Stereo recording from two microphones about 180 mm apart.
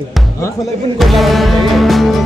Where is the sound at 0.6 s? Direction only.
Centre (ahead or behind).